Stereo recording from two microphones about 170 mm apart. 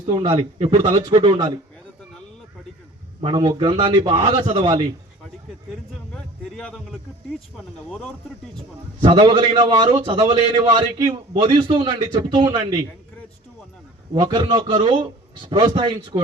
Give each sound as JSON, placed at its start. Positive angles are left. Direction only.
{"t": 0.0, "sound": "a man's voice", "side_deg": -25}
{"t": 3.2, "sound": "a man's voice", "side_deg": -25}
{"t": 6.1, "sound": "speech", "side_deg": 5}
{"t": 9.0, "sound": "a man's voice", "side_deg": -30}
{"t": 14.1, "sound": "a man's voice", "side_deg": -25}